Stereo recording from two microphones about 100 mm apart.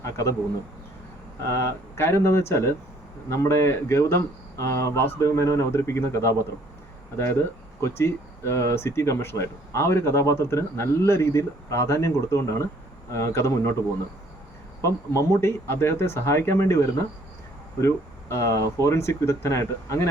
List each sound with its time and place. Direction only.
0.0 s a man's voice: 30° left (ahead or behind)
1.5 s speech: 30° left (ahead or behind)
7.8 s speech: 25° left (ahead or behind)
14.8 s speech: 30° left (ahead or behind)